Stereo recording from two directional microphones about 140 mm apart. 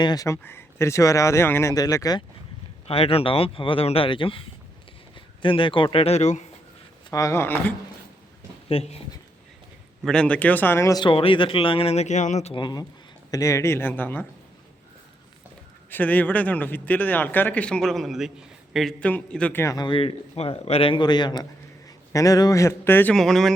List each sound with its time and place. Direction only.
0.0 s speech: 25° left (ahead or behind)
2.8 s a man's voice: 45° left (ahead or behind)
7.1 s speech: 20° left (ahead or behind)
8.7 s speech: 45° left (ahead or behind)
10.1 s speech: 10° left (ahead or behind)
11.0 s speech: 40° left (ahead or behind)
12.5 s a man's voice: 30° left (ahead or behind)
13.3 s speech: 20° left (ahead or behind)
15.9 s speech: 10° left (ahead or behind)
19.6 s a man's voice: 30° left (ahead or behind); by 23.1 s 15° left (ahead or behind)
23.1 s speech: 5° left (ahead or behind)